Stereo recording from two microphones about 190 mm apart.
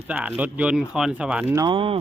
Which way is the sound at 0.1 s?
10° right (ahead or behind).